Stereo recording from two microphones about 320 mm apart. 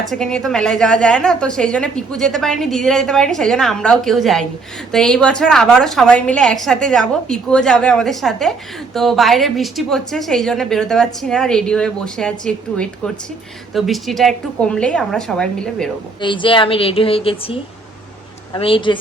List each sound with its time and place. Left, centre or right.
0.1 s a woman's voice: centre
16.2 s a woman's voice: centre